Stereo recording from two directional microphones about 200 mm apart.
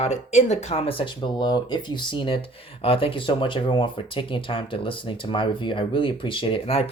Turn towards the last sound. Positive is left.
turn(degrees=30)  # may be behind; listen again after turning